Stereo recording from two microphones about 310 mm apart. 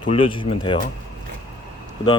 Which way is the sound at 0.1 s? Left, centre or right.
Centre.